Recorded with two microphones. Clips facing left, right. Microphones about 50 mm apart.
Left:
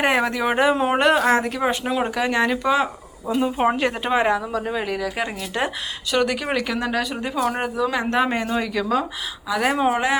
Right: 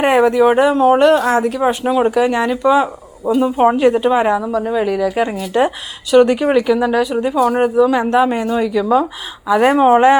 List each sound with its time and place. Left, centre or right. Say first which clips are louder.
0.0 s speech: right 9 dB; centre
8.1 s speech: right 7 dB; centre
9.5 s speech: right 9 dB; right